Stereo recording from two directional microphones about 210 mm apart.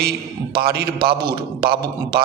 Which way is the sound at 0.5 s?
50° right (ahead or behind).